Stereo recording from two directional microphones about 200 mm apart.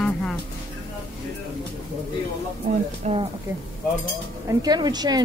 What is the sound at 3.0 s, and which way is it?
Speech, 35° right (ahead or behind).